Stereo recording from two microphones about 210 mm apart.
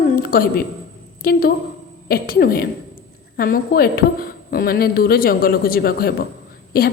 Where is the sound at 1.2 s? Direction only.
45° left (ahead or behind).